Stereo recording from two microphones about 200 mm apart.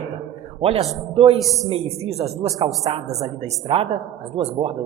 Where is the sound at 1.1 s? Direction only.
30° right (ahead or behind).